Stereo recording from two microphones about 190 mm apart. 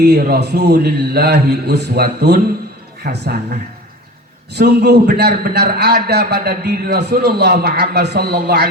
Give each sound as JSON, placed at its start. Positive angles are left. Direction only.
{"t": 0.0, "sound": "a man's voice", "side_deg": -60}